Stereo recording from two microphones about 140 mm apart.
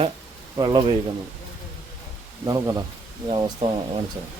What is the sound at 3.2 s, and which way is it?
Speech, 40° right (ahead or behind).